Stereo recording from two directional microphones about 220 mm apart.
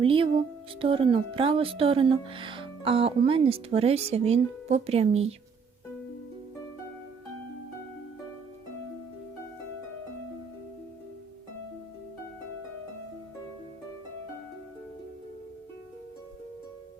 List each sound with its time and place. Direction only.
0.0 s speech: 25° right (ahead or behind)